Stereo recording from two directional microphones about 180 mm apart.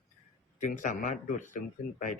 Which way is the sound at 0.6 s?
45° left (ahead or behind).